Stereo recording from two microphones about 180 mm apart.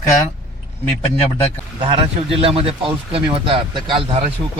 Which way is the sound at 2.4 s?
30° right (ahead or behind).